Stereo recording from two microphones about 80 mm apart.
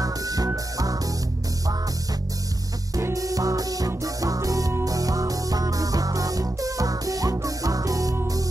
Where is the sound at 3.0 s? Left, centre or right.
Right.